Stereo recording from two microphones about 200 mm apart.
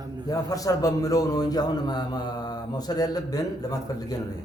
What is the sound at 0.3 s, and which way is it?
A man's voice, 20° left (ahead or behind).